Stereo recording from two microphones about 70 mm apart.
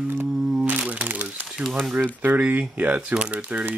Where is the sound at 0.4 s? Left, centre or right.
Centre.